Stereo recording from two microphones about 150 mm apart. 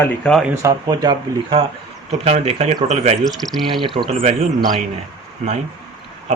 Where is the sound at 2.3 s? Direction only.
45° right (ahead or behind).